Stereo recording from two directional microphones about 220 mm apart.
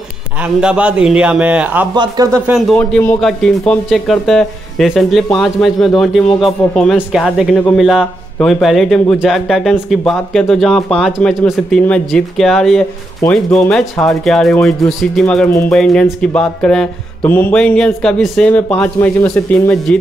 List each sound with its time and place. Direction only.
0.4 s speech: 5° right (ahead or behind)
2.5 s speech: 5° left (ahead or behind)